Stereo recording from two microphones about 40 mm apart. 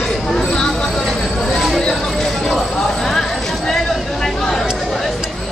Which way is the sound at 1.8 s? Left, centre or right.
Centre.